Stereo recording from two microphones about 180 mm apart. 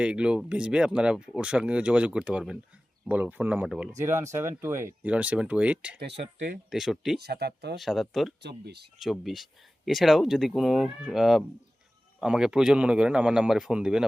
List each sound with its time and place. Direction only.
0.0 s speech: 5° right (ahead or behind)
6.0 s speech: 65° right (ahead or behind)
6.7 s speech: centre (ahead or behind)
7.2 s speech: 65° right (ahead or behind)
7.8 s speech: centre (ahead or behind)
8.4 s speech: 65° right (ahead or behind)
9.0 s speech: centre (ahead or behind)